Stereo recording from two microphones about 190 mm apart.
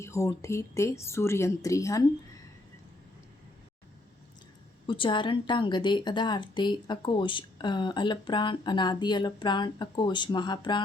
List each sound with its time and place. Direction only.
0.0 s speech: 15° left (ahead or behind)
4.9 s a woman's voice: 25° left (ahead or behind)